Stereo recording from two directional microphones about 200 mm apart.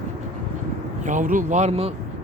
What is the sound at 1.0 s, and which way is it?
Speech, 40° right (ahead or behind).